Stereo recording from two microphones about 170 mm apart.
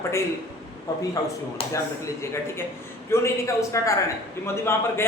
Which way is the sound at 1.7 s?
15° left (ahead or behind).